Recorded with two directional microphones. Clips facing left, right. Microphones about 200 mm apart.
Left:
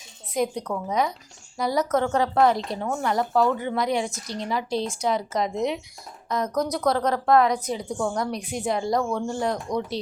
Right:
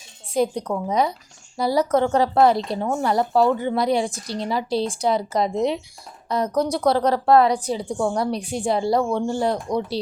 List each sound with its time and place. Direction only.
0.4 s a woman's voice: 30° right (ahead or behind)